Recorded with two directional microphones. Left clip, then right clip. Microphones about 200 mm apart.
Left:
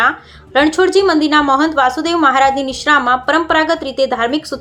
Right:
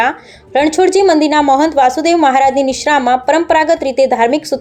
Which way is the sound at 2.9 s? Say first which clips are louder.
Right 2 dB; 40° left (ahead or behind).